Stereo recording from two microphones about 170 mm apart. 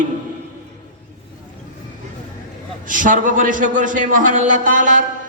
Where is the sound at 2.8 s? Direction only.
50° right (ahead or behind).